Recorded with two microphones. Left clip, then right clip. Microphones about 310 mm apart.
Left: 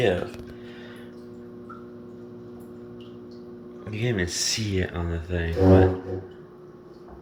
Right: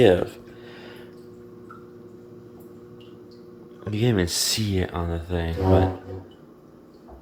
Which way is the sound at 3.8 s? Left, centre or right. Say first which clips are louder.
Right 4 dB; right.